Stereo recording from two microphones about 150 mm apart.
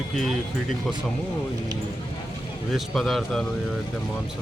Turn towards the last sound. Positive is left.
turn(degrees=0)  # may be behind; listen again after turning